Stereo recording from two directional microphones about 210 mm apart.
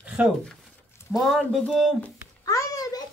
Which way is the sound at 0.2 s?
5° right (ahead or behind).